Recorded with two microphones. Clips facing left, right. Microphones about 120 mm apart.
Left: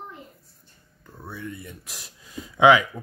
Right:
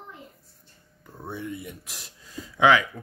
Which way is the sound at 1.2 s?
25° right (ahead or behind).